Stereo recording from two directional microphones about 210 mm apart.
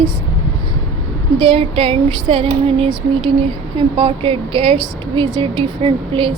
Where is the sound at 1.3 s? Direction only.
25° right (ahead or behind).